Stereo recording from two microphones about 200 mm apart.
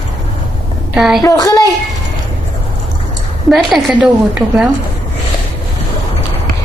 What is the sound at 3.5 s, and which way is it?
A woman's voice, centre (ahead or behind).